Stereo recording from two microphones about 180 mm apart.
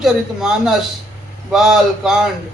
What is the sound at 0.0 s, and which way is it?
A man's voice, 5° right (ahead or behind).